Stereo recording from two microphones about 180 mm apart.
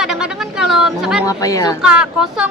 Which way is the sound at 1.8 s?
5° right (ahead or behind).